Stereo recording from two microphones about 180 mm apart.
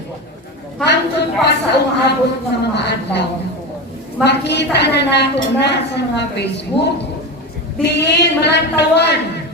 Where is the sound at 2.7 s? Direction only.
70° left (ahead or behind).